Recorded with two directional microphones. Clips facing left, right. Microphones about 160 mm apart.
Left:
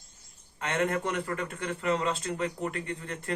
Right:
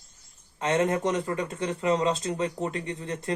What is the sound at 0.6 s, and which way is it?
Speech, 20° right (ahead or behind).